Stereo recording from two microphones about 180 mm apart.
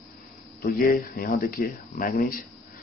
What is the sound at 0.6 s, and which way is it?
Speech, 55° left (ahead or behind).